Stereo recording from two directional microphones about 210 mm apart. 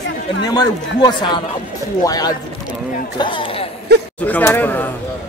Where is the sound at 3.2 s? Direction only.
25° left (ahead or behind).